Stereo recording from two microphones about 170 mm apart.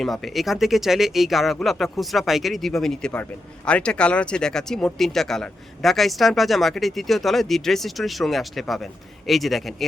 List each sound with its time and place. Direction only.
0.0 s speech: centre (ahead or behind)